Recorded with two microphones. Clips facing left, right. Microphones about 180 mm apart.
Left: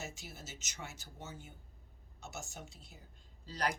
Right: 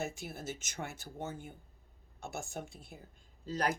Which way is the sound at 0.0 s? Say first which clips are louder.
Right 8 dB; 55° right (ahead or behind).